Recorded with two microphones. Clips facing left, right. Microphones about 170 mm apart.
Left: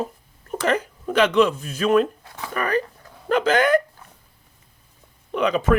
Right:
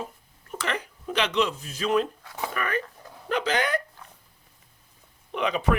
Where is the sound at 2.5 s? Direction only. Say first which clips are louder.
Left 7 dB; 35° left (ahead or behind).